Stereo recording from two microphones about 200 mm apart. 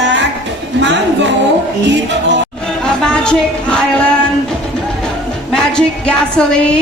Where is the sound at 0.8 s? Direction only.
60° right (ahead or behind).